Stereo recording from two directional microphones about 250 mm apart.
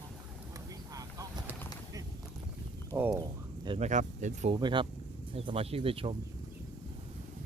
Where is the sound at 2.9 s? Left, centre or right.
Centre.